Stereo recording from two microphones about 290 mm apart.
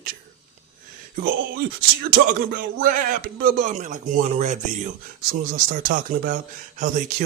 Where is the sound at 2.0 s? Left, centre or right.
Right.